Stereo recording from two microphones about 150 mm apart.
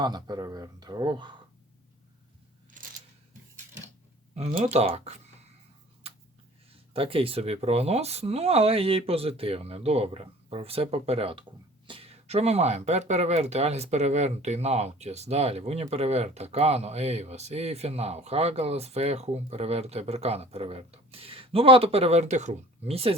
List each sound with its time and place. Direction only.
0.0 s speech: 30° right (ahead or behind)
2.8 s a sound: 60° right (ahead or behind)
4.6 s speech: 45° right (ahead or behind)
6.9 s speech: 40° right (ahead or behind)